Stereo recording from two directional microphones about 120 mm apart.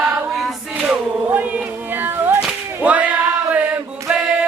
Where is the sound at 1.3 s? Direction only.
15° right (ahead or behind).